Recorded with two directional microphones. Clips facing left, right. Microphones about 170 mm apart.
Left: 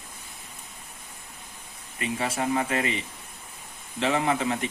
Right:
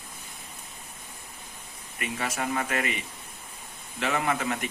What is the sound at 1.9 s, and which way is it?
Speech, 30° left (ahead or behind).